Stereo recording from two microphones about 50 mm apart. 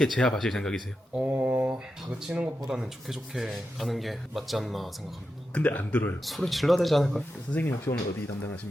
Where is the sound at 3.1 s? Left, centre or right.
Centre.